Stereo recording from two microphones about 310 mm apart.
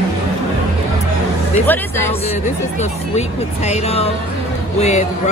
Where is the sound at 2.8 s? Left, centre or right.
Left.